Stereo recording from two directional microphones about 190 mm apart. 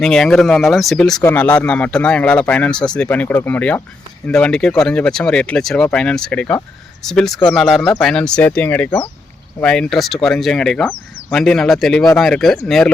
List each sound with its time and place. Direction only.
0.0 s speech: 5° left (ahead or behind)